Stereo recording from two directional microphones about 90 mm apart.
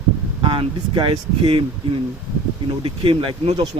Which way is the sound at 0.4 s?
80° right.